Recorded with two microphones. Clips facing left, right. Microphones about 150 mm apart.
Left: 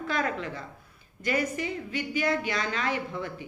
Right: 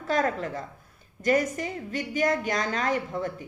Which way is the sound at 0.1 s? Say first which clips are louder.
Right 5 dB; 40° right (ahead or behind).